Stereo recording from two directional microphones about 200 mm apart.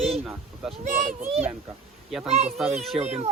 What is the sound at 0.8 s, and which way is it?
Speech, 40° right (ahead or behind).